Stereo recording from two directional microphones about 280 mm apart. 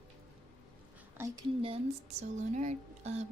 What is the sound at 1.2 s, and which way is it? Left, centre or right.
A woman's voice, centre.